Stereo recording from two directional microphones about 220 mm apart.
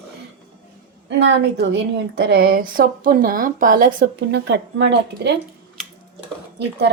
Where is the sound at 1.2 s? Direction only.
55° right (ahead or behind).